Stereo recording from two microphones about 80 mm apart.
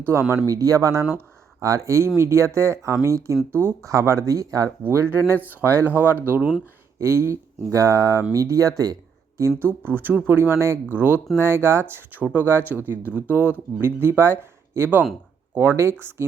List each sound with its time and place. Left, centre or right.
0.0 s speech: right
0.4 s speech: right
3.5 s speech: right
4.8 s speech: right
7.0 s speech: right
9.6 s speech: right
12.2 s speech: centre